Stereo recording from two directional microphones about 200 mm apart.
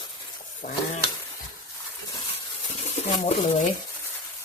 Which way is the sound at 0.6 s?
50° left (ahead or behind).